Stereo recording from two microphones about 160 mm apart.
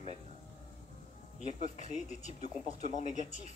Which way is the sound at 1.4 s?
50° left (ahead or behind).